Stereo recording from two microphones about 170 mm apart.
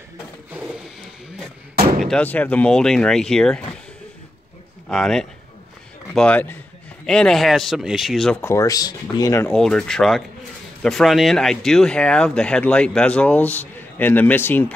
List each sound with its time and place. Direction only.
2.0 s speech: 10° left (ahead or behind)
4.8 s speech: 5° left (ahead or behind)
8.4 s speech: 15° left (ahead or behind)
9.5 s speech: 5° left (ahead or behind)